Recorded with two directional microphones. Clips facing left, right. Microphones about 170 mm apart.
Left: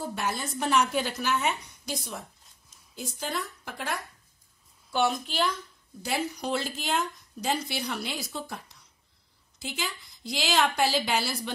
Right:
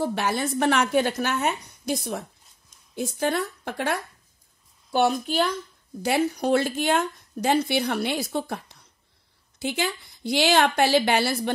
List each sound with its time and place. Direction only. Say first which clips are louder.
0.0 s a woman's voice: right 7 dB; 75° right (ahead or behind)
4.9 s a woman's voice: right 5 dB; 45° right (ahead or behind)
6.0 s speech: right 8 dB; 60° right (ahead or behind)